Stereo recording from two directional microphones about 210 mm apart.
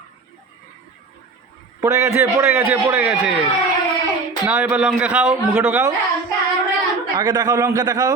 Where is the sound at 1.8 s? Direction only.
15° right (ahead or behind).